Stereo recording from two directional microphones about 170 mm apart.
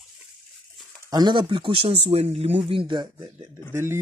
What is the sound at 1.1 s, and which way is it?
Speech, 25° right (ahead or behind).